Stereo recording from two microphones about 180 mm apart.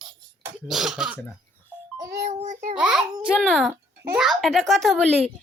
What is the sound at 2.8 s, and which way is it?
A child's voice, 5° right (ahead or behind).